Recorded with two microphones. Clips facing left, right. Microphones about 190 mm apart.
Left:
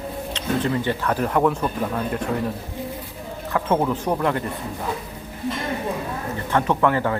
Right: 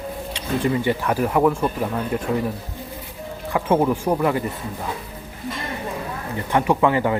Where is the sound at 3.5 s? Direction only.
10° right (ahead or behind).